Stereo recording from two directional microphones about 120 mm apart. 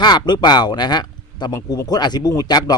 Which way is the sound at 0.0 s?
35° left (ahead or behind).